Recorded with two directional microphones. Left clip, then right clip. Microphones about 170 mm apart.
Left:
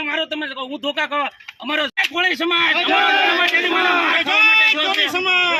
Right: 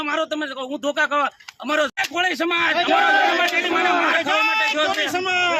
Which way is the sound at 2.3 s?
20° right (ahead or behind).